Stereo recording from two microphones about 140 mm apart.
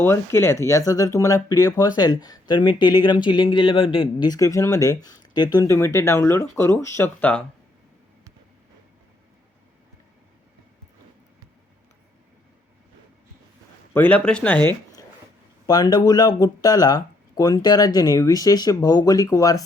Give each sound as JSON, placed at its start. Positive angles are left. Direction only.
{"t": 0.0, "sound": "speech", "side_deg": 20}
{"t": 13.9, "sound": "speech", "side_deg": 10}
{"t": 15.6, "sound": "speech", "side_deg": 25}